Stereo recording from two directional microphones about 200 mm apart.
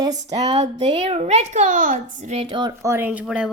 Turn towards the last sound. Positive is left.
turn(degrees=-5)  # may be behind; listen again after turning